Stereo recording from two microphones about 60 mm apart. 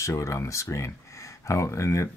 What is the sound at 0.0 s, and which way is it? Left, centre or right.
Speech, left.